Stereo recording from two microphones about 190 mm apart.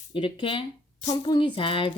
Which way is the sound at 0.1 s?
25° left (ahead or behind).